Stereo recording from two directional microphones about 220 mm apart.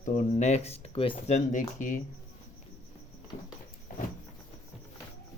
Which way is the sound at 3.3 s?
35° left (ahead or behind).